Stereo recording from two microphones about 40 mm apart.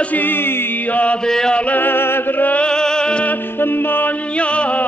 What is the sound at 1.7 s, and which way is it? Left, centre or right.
Music, left.